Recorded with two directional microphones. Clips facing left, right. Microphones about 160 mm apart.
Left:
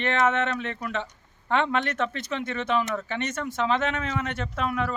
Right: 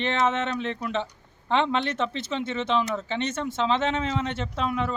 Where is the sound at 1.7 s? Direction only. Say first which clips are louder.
Even; 25° right (ahead or behind).